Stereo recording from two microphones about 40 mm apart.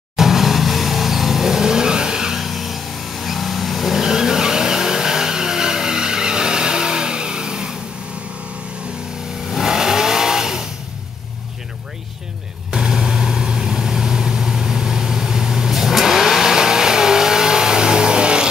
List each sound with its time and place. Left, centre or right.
0.1 s vehicle: centre
9.5 s vehicle: centre
12.7 s vehicle: centre